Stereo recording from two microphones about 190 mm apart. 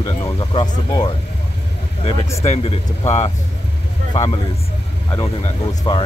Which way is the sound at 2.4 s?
35° left (ahead or behind).